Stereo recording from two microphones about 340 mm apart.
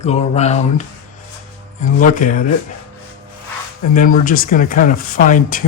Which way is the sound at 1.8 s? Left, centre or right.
Left.